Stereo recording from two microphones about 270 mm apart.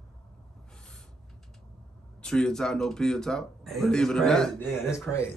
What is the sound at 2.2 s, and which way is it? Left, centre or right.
Speech, centre.